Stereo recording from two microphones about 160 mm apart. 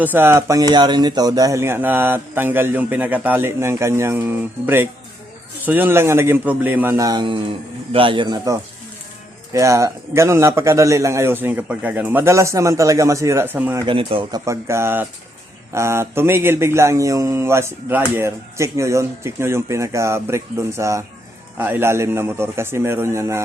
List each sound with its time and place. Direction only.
0.0 s a man's voice: 10° right (ahead or behind)
13.8 s speech: 35° right (ahead or behind); by 23.4 s 15° right (ahead or behind)